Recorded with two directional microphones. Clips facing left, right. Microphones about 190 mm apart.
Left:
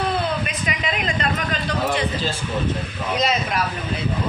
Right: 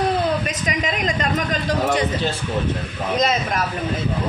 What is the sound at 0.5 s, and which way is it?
A man's voice, 40° right (ahead or behind).